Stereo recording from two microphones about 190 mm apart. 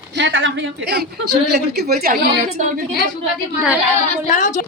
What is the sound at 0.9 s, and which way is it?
Speech, 60° right (ahead or behind).